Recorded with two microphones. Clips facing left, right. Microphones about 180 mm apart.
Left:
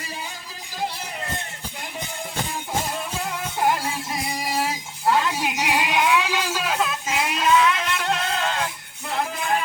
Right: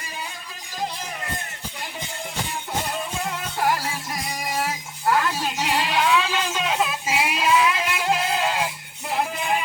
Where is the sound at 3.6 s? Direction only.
20° left (ahead or behind).